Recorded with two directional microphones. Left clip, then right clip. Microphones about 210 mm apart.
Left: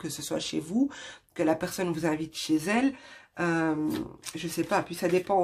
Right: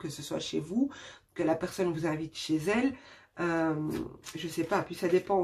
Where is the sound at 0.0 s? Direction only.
45° left (ahead or behind).